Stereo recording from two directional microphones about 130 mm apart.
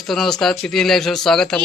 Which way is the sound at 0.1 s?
5° left (ahead or behind).